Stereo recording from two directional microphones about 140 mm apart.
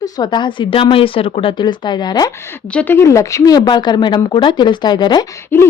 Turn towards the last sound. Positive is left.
turn(degrees=15)  # may be behind; listen again after turning